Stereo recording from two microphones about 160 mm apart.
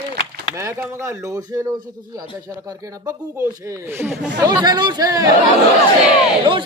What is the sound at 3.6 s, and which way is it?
Speech, 15° right (ahead or behind).